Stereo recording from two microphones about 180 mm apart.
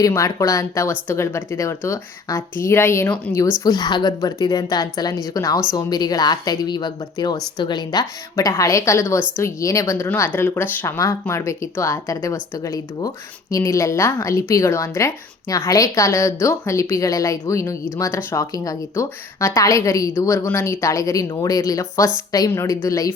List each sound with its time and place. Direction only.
0.0 s a woman's voice: 15° left (ahead or behind)